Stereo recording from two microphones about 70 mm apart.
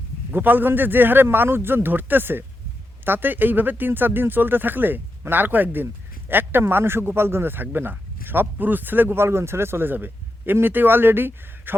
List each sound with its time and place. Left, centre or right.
0.3 s speech: right